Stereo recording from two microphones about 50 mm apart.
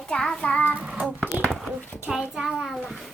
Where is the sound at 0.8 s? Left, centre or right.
Right.